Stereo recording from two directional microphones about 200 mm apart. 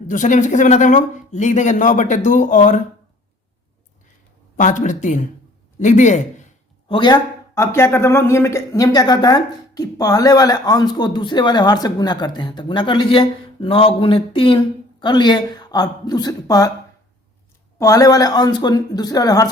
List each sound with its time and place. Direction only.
0.1 s speech: 40° left (ahead or behind)
4.5 s speech: 40° left (ahead or behind)
6.8 s speech: 25° left (ahead or behind)
17.7 s speech: 15° left (ahead or behind)